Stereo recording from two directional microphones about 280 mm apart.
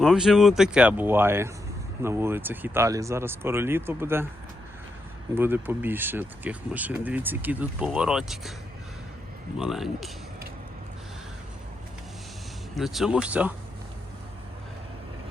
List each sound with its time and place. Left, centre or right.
0.0 s speech: centre
5.3 s speech: centre
9.6 s speech: centre
12.7 s speech: centre